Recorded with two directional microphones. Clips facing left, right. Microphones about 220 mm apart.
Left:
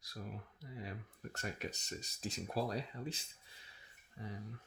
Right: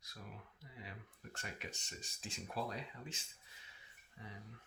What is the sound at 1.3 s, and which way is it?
Speech, 40° left (ahead or behind).